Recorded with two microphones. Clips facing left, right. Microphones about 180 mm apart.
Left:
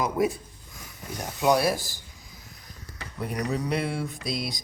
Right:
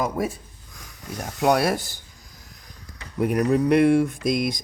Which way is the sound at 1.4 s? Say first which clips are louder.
Right 2 dB; 60° right (ahead or behind).